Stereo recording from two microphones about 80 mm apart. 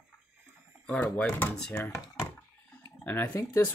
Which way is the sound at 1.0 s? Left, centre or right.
Left.